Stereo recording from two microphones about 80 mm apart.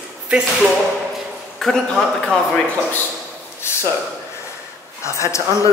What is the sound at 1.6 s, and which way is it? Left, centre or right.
Speech, centre.